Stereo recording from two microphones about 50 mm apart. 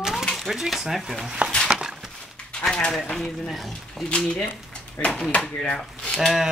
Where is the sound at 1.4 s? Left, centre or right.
Right.